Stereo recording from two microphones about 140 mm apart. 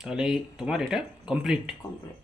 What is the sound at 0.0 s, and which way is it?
Speech, 5° right (ahead or behind).